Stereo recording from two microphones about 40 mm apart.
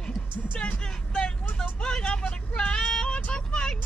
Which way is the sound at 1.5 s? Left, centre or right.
Left.